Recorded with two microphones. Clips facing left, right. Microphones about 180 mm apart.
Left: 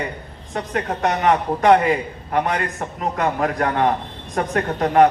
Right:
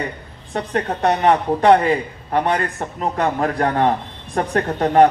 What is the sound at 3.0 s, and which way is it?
A man's voice, 30° right (ahead or behind).